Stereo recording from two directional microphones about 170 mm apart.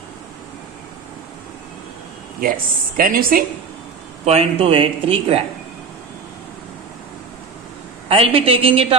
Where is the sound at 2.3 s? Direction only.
60° right (ahead or behind).